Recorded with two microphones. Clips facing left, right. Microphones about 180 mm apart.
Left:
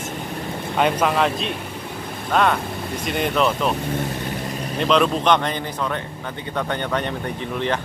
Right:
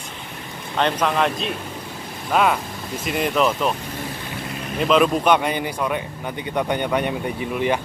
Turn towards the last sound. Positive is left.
turn(degrees=-10)  # may be behind; listen again after turning